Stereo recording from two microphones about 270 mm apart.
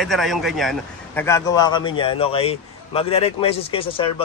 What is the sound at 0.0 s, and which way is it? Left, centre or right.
A man's voice, centre.